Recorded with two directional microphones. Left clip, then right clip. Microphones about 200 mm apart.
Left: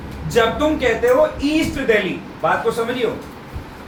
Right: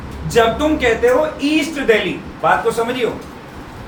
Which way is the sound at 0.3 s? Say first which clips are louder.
Right 2 dB; 20° right (ahead or behind).